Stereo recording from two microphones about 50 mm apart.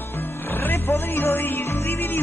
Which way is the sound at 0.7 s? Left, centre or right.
Left.